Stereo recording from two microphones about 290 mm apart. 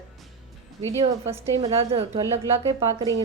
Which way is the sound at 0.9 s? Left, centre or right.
Centre.